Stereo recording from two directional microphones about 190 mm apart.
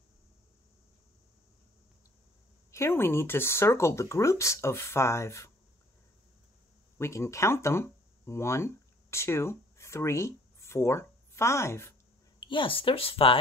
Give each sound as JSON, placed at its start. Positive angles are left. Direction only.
{"t": 2.7, "sound": "speech", "side_deg": 15}
{"t": 7.0, "sound": "speech", "side_deg": 15}
{"t": 12.4, "sound": "speech", "side_deg": 25}